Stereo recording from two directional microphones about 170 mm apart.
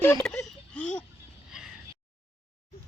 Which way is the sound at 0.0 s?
10° left (ahead or behind).